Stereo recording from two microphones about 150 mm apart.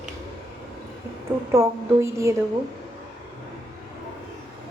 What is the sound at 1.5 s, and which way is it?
Speech, 20° right (ahead or behind).